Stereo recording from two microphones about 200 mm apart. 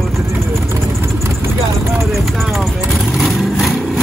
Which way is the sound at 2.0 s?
Centre (ahead or behind).